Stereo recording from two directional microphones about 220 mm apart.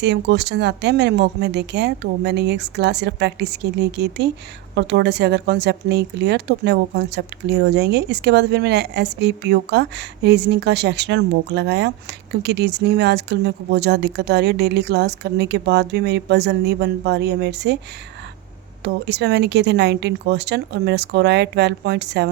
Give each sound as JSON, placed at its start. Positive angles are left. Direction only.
{"t": 0.0, "sound": "speech", "side_deg": -50}
{"t": 19.0, "sound": "speech", "side_deg": -50}